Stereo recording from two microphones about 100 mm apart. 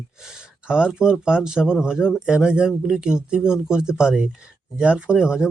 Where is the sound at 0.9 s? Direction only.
5° right (ahead or behind).